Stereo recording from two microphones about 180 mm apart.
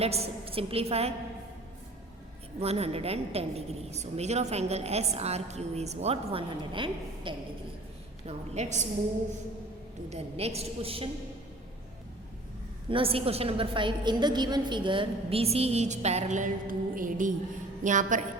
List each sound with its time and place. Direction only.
0.0 s a woman's voice: 35° right (ahead or behind)
2.6 s a woman's voice: 35° right (ahead or behind)
8.3 s a woman's voice: 40° right (ahead or behind)
10.1 s a woman's voice: 35° right (ahead or behind)
12.9 s a woman's voice: 30° right (ahead or behind)